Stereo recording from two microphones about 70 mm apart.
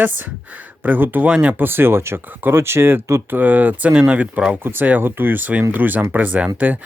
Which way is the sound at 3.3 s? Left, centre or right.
Right.